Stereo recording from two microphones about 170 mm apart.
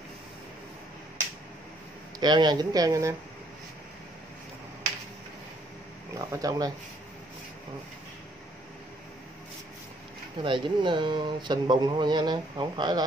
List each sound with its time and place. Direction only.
2.1 s speech: 25° right (ahead or behind)
6.1 s speech: 20° right (ahead or behind)
10.4 s speech: 30° right (ahead or behind)